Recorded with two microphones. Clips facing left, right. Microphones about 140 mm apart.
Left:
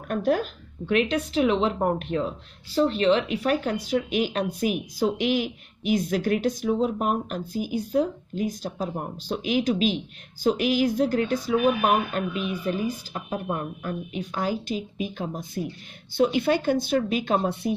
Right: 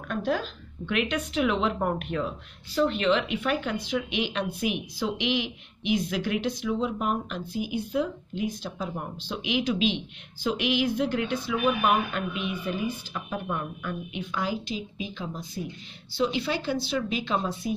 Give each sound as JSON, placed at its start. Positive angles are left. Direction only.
{"t": 0.1, "sound": "speech", "side_deg": 50}
{"t": 0.9, "sound": "a woman's voice", "side_deg": 35}